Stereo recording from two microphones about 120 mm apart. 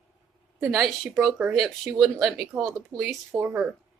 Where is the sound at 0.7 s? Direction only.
Centre (ahead or behind).